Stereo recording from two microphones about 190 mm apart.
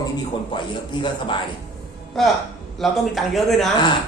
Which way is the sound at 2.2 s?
Centre (ahead or behind).